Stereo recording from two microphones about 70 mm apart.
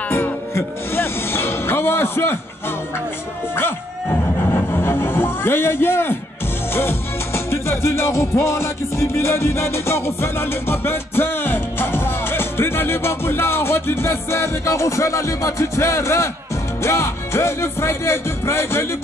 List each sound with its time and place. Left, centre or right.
0.1 s music: left
3.5 s music: left